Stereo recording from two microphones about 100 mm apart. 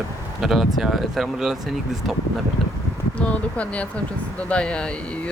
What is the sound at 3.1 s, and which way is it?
Speech, 15° left (ahead or behind).